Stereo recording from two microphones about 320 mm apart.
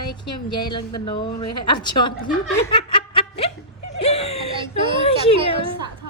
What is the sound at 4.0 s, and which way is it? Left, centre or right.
Whimper, centre.